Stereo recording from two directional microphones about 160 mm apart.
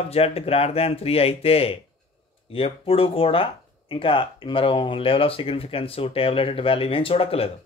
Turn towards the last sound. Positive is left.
turn(degrees=35)  # may be behind; listen again after turning